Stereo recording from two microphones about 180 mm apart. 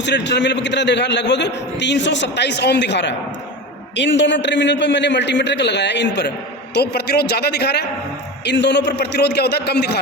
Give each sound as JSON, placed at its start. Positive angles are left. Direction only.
{"t": 0.0, "sound": "a man's voice", "side_deg": 75}